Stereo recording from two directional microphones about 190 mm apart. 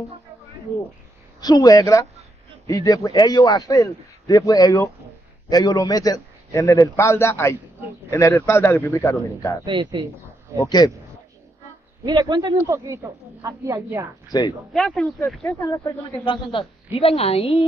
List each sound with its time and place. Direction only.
1.4 s a man's voice: 20° left (ahead or behind)
9.7 s speech: 25° right (ahead or behind)
10.6 s a man's voice: 20° left (ahead or behind)
12.0 s speech: 20° right (ahead or behind)
14.3 s a man's voice: 20° left (ahead or behind)
14.7 s speech: centre (ahead or behind)
15.4 s a man's voice: 15° left (ahead or behind)
16.5 s a woman's voice: 30° left (ahead or behind)